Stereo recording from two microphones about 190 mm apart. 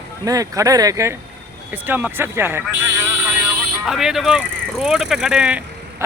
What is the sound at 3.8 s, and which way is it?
Speech, centre (ahead or behind).